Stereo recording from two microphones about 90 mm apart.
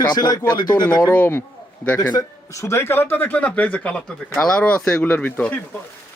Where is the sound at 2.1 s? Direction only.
35° left (ahead or behind); by 5.5 s 15° left (ahead or behind).